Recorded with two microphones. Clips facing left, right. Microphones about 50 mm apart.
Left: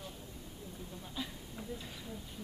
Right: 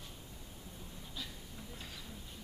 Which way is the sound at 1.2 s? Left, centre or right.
Centre.